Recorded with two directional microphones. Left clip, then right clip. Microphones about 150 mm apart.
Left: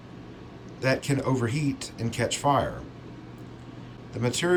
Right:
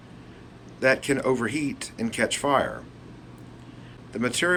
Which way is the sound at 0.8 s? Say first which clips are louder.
Right 4 dB; 45° left (ahead or behind).